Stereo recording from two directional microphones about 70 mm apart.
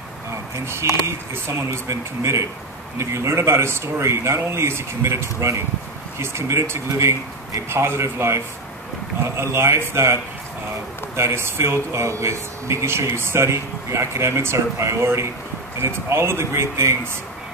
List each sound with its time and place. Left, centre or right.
0.3 s speech: right
9.4 s speech: right
11.1 s speech: right